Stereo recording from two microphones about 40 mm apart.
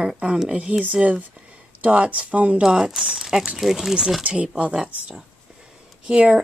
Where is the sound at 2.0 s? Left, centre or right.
Right.